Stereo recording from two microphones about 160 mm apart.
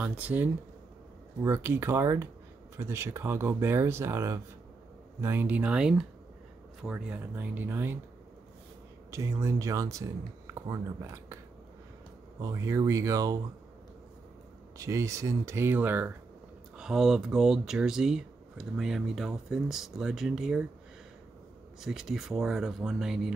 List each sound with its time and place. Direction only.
0.0 s speech: 10° right (ahead or behind)
9.1 s speech: 20° right (ahead or behind)
12.4 s speech: 20° right (ahead or behind)
14.8 s speech: 20° right (ahead or behind); by 20.6 s 5° right (ahead or behind)
21.8 s speech: centre (ahead or behind)